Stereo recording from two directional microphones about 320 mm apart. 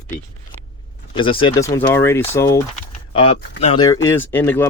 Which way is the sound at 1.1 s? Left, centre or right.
Centre.